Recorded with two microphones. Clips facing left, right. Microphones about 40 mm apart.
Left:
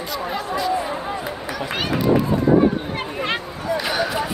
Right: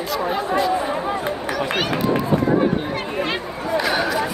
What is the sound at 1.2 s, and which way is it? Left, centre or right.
Speech, right.